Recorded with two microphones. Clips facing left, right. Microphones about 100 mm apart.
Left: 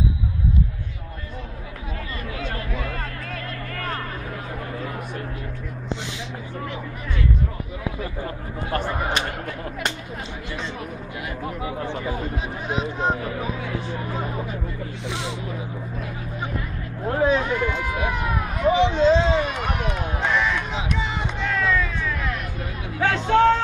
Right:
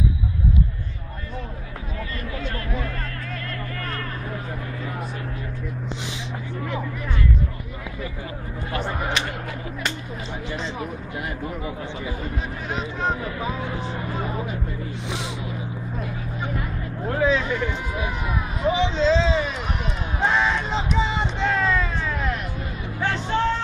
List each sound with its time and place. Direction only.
11.8 s speech: 45° left (ahead or behind)
12.6 s speech: 15° left (ahead or behind)
17.2 s run: 50° left (ahead or behind)
20.2 s a sound: 25° right (ahead or behind)
22.9 s hubbub: 75° left (ahead or behind)